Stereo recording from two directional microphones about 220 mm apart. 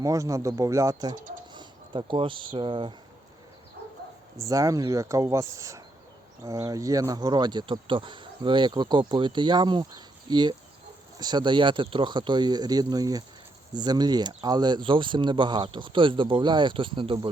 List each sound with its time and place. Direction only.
0.0 s speech: 15° right (ahead or behind)
4.4 s speech: 15° right (ahead or behind)